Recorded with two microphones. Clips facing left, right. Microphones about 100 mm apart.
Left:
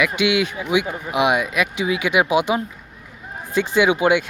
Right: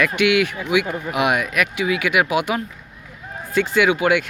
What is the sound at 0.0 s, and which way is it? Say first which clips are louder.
Speech: right 1 dB; 15° left (ahead or behind).